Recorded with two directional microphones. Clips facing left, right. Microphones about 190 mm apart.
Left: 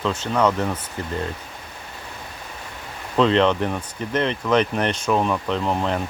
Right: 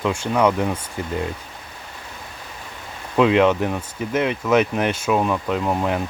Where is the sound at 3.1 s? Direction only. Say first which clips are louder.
Right 2 dB; 10° right (ahead or behind).